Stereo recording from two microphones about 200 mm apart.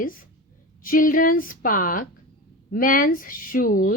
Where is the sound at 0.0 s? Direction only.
45° left (ahead or behind).